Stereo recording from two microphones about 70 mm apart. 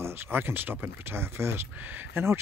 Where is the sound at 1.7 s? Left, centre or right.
Right.